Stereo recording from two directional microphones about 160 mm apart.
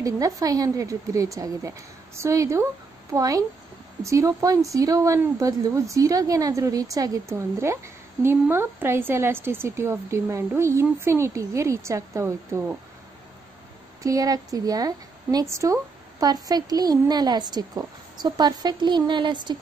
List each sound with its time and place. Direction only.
0.4 s a woman's voice: 20° right (ahead or behind)
14.0 s a woman's voice: 20° right (ahead or behind)